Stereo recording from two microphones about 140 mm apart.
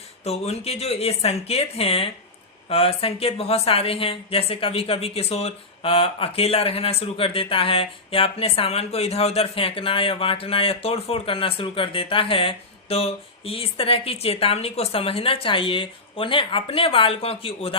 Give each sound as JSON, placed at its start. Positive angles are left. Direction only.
{"t": 0.3, "sound": "a woman's voice", "side_deg": 45}